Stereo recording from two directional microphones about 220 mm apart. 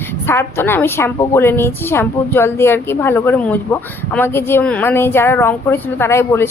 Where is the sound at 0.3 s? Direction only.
10° left (ahead or behind).